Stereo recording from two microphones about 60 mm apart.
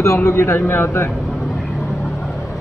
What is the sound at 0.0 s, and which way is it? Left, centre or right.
A man's voice, left.